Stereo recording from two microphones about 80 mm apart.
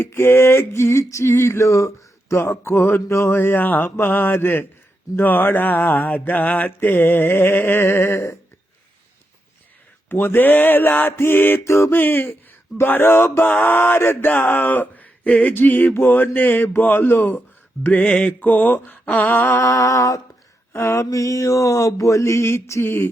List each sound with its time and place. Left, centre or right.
0.0 s mantra: left
10.1 s mantra: left
19.6 s music: left
20.7 s mantra: left